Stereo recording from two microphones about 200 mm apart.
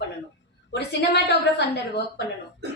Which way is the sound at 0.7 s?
60° left (ahead or behind).